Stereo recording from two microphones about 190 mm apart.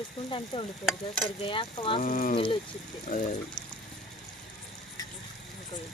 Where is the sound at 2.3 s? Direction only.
25° left (ahead or behind).